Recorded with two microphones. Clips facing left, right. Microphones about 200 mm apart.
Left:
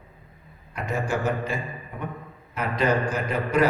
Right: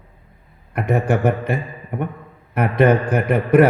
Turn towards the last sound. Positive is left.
turn(degrees=-60)  # may be behind; listen again after turning